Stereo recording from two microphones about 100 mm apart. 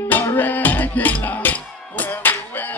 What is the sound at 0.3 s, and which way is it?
Music, 20° left (ahead or behind).